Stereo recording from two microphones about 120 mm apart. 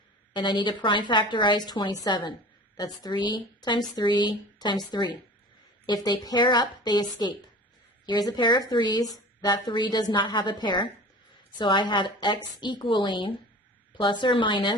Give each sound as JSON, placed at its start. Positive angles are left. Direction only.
{"t": 0.3, "sound": "a woman's voice", "side_deg": 40}